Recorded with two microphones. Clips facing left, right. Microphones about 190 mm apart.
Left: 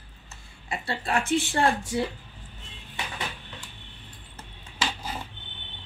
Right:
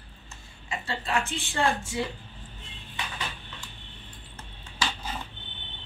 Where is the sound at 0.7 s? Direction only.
35° left (ahead or behind).